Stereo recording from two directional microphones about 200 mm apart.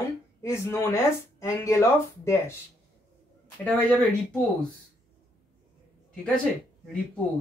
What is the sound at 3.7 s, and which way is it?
Speech, 5° left (ahead or behind).